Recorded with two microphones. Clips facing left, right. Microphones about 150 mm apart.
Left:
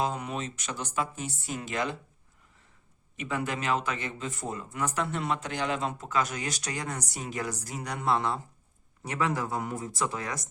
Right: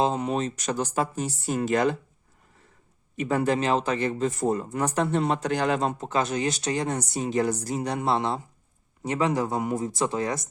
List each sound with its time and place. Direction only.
0.0 s speech: 30° right (ahead or behind); by 2.0 s 45° right (ahead or behind)
3.2 s speech: 40° right (ahead or behind)
6.0 s speech: 30° right (ahead or behind)